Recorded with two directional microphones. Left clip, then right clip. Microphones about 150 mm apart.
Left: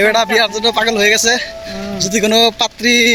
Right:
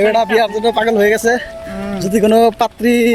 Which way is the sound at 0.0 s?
15° right (ahead or behind).